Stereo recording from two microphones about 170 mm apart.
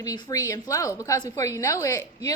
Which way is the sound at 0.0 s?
20° left (ahead or behind).